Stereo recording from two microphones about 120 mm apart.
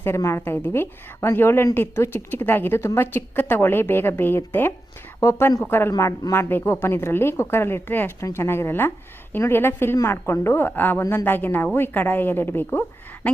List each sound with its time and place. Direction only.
0.0 s a woman's voice: 20° left (ahead or behind)